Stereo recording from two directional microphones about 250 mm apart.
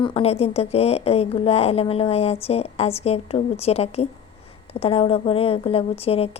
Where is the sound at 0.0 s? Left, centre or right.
Left.